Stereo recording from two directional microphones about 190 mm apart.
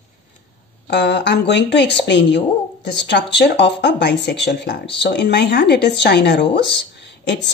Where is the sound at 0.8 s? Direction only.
65° left (ahead or behind).